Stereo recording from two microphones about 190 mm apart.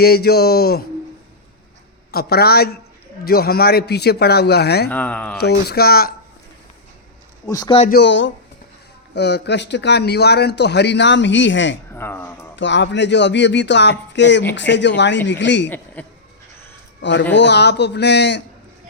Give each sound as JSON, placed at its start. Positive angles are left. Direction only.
{"t": 0.0, "sound": "a man's voice", "side_deg": 55}
{"t": 2.1, "sound": "a man's voice", "side_deg": 55}
{"t": 4.9, "sound": "speech", "side_deg": 10}
{"t": 5.4, "sound": "a man's voice", "side_deg": 60}
{"t": 7.4, "sound": "a man's voice", "side_deg": 20}
{"t": 7.9, "sound": "a man's voice", "side_deg": 65}
{"t": 11.9, "sound": "speech", "side_deg": 10}
{"t": 12.5, "sound": "speech", "side_deg": 70}
{"t": 16.0, "sound": "speech", "side_deg": 10}
{"t": 17.0, "sound": "a man's voice", "side_deg": 70}